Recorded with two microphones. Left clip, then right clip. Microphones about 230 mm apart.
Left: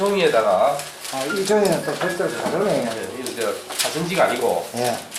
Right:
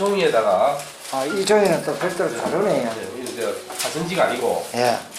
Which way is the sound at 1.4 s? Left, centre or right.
Centre.